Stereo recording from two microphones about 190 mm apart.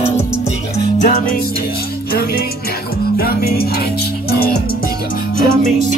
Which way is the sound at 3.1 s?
55° left (ahead or behind).